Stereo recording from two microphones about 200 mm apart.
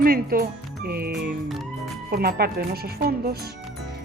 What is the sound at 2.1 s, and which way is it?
Speech, 50° right (ahead or behind).